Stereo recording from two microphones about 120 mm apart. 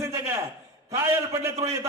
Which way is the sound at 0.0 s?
25° right (ahead or behind).